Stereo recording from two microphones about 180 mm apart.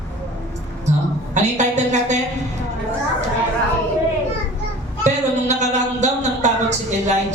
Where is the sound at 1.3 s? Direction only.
40° right (ahead or behind).